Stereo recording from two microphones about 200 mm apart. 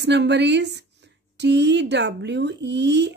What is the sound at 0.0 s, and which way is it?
A woman's voice, 60° right (ahead or behind).